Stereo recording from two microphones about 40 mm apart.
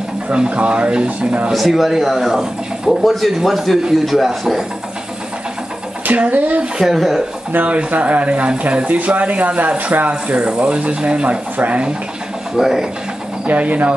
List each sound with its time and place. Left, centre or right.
0.5 s speech: right
1.5 s a man's voice: centre
6.0 s speech: right
6.8 s speech: centre
7.5 s speech: right
11.2 s speech: right
12.5 s speech: centre
13.5 s speech: right